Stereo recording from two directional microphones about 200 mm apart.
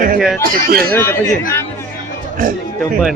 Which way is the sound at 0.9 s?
10° left (ahead or behind).